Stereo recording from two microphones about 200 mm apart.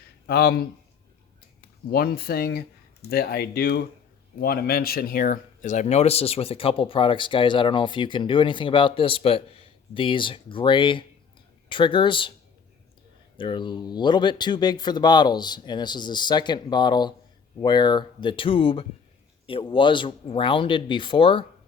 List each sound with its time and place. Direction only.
0.3 s speech: 50° left (ahead or behind)
1.9 s speech: 50° left (ahead or behind); by 12.3 s 25° left (ahead or behind)
13.3 s speech: 25° left (ahead or behind)